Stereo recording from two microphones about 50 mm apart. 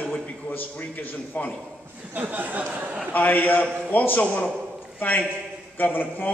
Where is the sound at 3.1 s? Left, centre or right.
Left.